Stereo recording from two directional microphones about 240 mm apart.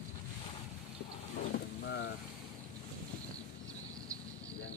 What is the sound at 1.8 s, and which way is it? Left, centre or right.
Vehicle, left.